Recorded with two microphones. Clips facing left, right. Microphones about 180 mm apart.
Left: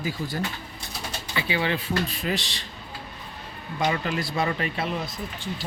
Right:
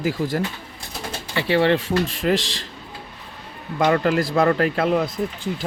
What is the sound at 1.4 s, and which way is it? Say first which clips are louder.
Speech: right 9 dB; 75° right (ahead or behind).